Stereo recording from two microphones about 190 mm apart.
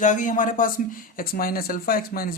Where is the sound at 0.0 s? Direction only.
40° left (ahead or behind).